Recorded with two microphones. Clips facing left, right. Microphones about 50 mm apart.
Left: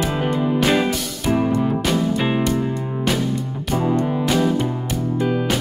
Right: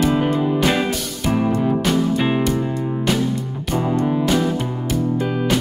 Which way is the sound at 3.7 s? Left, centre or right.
Centre.